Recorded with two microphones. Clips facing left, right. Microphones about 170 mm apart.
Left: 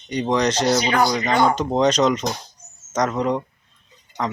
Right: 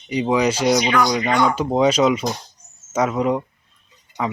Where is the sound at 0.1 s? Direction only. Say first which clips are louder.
Right 2 dB; 5° right (ahead or behind).